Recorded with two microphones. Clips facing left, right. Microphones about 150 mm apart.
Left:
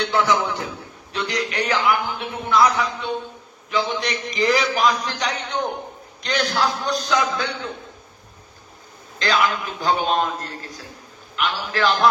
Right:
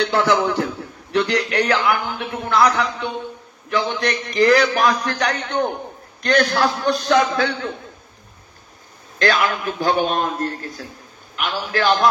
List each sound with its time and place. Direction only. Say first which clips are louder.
0.0 s a man's voice: right 3 dB; 60° right (ahead or behind)
9.2 s a man's voice: right 2 dB; 60° right (ahead or behind)